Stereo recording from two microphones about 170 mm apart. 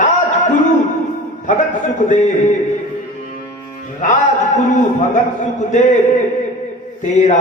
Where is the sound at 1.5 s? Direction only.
50° left (ahead or behind).